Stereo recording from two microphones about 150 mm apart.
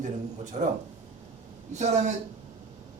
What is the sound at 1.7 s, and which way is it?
Speech, 50° right (ahead or behind).